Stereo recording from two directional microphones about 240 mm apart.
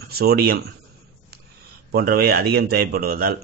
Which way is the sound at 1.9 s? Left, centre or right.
Right.